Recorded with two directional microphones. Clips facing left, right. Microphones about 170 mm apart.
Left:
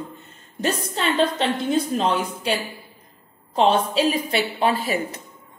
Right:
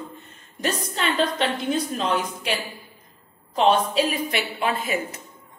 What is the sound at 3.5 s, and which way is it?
A woman's voice, 30° left (ahead or behind).